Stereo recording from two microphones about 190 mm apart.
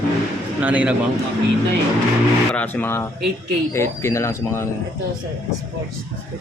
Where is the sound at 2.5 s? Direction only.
10° left (ahead or behind).